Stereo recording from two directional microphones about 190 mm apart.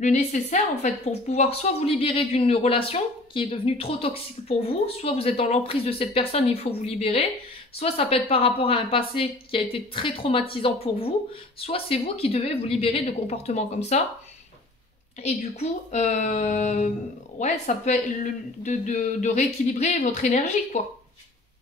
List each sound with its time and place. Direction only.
0.0 s a woman's voice: 40° left (ahead or behind)
15.2 s a woman's voice: 35° left (ahead or behind)